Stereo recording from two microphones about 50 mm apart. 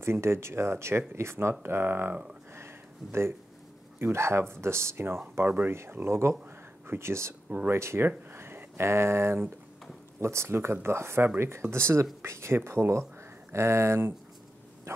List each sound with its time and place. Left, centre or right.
0.0 s speech: right
1.5 s speech: right
2.5 s a sound: right
4.0 s speech: right
4.9 s speech: right
5.7 s speech: right
7.4 s speech: right
7.7 s speech: right
8.3 s a sound: right
10.2 s speech: right
14.9 s vehicle: right